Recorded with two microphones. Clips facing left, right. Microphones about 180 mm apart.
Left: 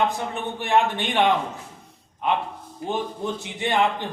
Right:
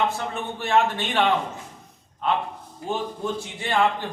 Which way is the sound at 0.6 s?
15° left (ahead or behind).